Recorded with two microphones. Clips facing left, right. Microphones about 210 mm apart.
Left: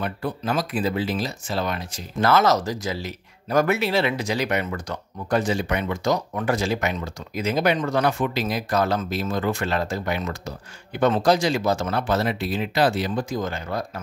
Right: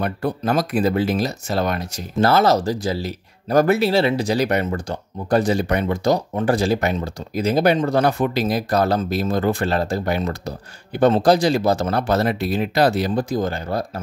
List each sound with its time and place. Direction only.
0.0 s speech: 40° right (ahead or behind)
2.1 s speech: 30° right (ahead or behind)